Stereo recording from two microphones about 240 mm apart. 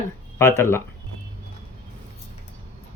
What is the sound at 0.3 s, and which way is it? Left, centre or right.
Speech, centre.